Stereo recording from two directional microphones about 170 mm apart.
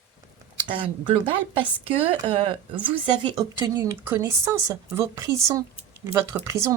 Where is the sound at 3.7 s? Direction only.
15° right (ahead or behind).